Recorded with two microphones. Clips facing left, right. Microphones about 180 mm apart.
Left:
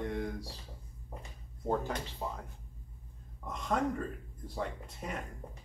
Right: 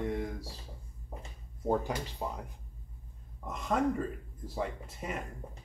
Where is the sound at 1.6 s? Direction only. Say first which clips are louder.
Right 2 dB; 15° right (ahead or behind).